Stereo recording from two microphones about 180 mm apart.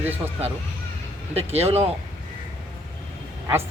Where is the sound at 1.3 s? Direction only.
35° right (ahead or behind).